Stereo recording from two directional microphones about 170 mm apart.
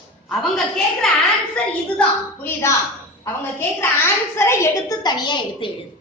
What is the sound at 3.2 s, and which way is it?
A woman's voice, 15° left (ahead or behind).